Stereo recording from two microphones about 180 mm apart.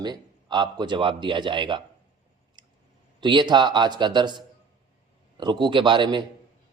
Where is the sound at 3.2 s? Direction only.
25° right (ahead or behind).